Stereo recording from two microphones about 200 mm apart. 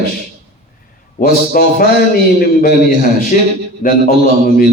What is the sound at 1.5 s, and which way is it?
A man's voice, 45° left (ahead or behind).